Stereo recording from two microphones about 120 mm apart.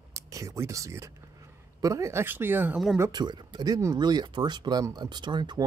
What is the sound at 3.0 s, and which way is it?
Speech, 35° right (ahead or behind).